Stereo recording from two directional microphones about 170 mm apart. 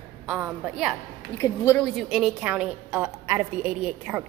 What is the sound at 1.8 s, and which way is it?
A woman's voice, centre (ahead or behind).